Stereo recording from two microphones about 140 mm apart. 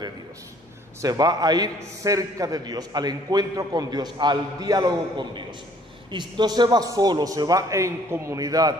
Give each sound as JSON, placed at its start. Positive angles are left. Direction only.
{"t": 1.0, "sound": "a man's voice", "side_deg": -25}